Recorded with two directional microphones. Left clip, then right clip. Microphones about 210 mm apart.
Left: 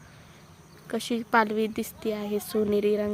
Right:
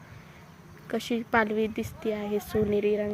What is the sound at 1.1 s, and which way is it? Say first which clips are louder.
A woman's voice: left 2 dB; 15° left (ahead or behind).